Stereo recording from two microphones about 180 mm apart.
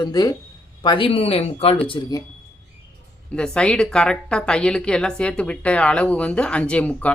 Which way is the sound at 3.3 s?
5° left (ahead or behind).